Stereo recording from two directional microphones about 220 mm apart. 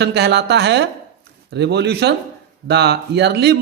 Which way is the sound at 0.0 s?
50° right (ahead or behind).